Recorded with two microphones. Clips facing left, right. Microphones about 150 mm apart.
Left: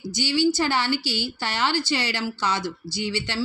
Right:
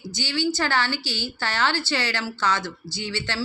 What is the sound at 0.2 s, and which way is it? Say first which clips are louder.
Speech: left 4 dB; 15° left (ahead or behind).